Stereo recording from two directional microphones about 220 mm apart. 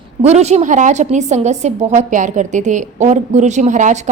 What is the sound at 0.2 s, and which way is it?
A woman's voice, 30° right (ahead or behind).